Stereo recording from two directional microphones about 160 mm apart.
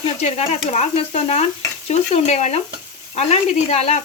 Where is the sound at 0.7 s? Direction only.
40° left (ahead or behind).